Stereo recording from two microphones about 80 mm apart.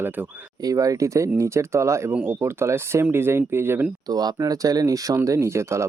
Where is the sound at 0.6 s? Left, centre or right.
Right.